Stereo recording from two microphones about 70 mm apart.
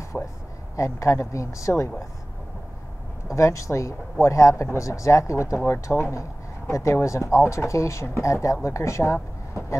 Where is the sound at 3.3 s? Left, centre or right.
Left.